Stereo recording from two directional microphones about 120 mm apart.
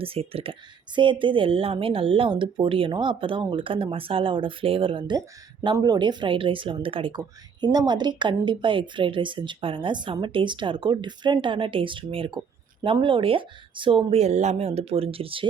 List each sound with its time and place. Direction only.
0.0 s speech: 55° right (ahead or behind)
0.9 s speech: 45° right (ahead or behind)
7.2 s speech: 35° right (ahead or behind)